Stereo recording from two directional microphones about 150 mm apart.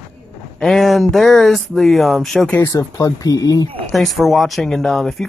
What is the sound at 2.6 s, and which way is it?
Speech, 20° left (ahead or behind).